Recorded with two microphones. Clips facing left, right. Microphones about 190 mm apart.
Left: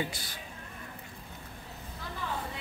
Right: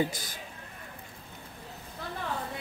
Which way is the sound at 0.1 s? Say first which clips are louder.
Right 2 dB; 45° right (ahead or behind).